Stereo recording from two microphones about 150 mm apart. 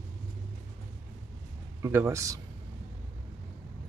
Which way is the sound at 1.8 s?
15° right (ahead or behind).